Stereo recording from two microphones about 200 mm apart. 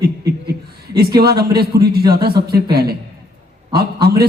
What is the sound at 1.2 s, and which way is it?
A man's voice, 50° right (ahead or behind).